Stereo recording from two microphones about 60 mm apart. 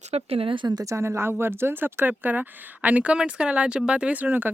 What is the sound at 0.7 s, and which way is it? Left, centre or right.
Speech, right.